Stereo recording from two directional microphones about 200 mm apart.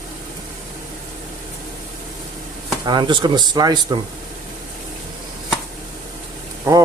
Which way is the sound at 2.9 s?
20° right (ahead or behind).